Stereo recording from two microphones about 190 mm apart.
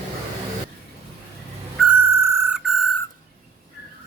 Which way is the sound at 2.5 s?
Centre (ahead or behind).